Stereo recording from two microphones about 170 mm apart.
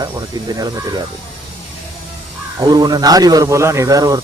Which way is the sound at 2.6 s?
25° right (ahead or behind).